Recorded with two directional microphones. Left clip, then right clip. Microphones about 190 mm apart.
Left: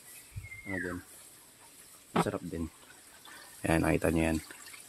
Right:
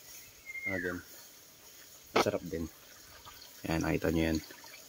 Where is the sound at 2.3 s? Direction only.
20° left (ahead or behind).